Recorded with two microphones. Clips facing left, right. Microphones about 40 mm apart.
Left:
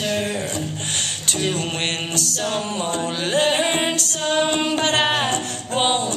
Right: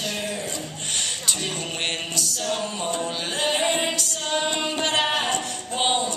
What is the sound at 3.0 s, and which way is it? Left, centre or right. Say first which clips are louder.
Music: left 9 dB; left.